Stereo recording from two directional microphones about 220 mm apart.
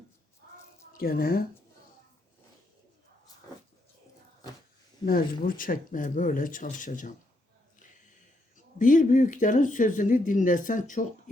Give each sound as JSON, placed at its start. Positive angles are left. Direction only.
{"t": 0.9, "sound": "speech", "side_deg": 40}
{"t": 5.0, "sound": "speech", "side_deg": 40}
{"t": 8.5, "sound": "speech", "side_deg": 35}